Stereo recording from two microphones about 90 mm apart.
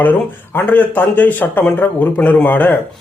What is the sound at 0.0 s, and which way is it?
A man's voice, 20° left (ahead or behind).